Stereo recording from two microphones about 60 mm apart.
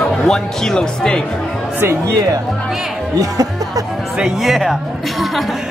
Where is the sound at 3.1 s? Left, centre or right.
Right.